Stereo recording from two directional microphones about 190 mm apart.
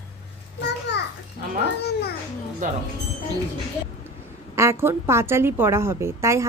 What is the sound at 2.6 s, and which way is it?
Speech, 40° right (ahead or behind).